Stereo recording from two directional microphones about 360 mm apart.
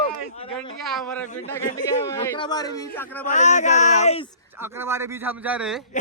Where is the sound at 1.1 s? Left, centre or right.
Centre.